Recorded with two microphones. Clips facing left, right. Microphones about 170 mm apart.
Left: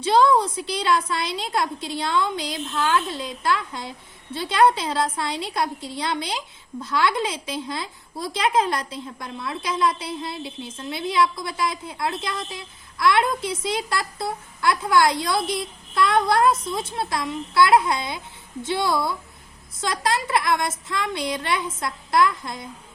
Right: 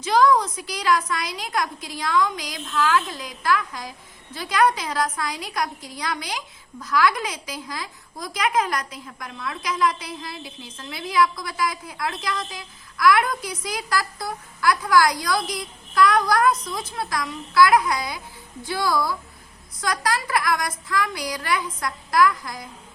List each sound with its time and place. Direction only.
0.0 s a woman's voice: 30° left (ahead or behind)